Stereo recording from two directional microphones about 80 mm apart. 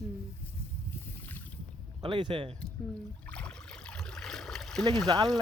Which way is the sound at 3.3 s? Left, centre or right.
Centre.